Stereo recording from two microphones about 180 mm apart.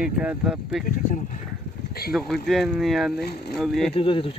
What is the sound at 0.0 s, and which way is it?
Speech, 5° right (ahead or behind).